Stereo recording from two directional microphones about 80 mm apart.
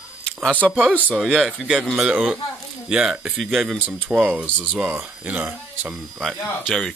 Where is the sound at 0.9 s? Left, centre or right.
Left.